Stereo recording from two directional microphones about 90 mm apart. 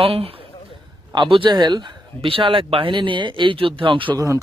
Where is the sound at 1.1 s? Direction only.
60° right (ahead or behind).